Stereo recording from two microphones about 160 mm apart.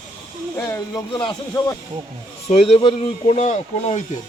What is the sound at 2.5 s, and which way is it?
Speech, 35° left (ahead or behind).